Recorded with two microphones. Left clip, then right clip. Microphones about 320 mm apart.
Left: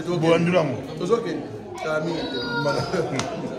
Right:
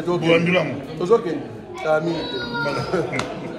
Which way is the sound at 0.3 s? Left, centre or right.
Centre.